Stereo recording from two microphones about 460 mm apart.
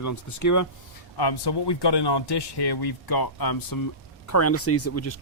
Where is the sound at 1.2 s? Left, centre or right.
Left.